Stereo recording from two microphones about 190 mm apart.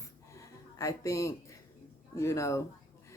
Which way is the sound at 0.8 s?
15° left (ahead or behind).